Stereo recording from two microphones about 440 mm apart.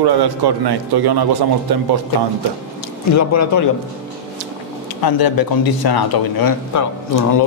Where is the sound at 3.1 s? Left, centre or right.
Left.